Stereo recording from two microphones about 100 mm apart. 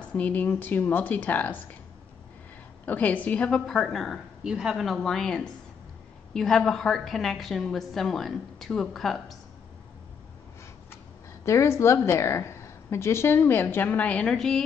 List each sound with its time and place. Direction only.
0.0 s speech: 15° left (ahead or behind)
2.8 s a woman's voice: 15° left (ahead or behind)
11.4 s a woman's voice: 30° left (ahead or behind); by 14.6 s 5° left (ahead or behind)